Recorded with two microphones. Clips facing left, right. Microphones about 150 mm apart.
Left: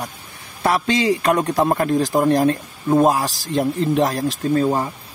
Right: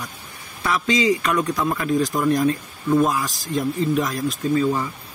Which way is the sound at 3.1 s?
70° left (ahead or behind).